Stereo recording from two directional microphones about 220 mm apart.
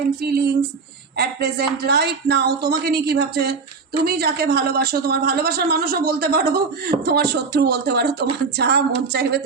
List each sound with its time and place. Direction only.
0.2 s a woman's voice: 45° right (ahead or behind)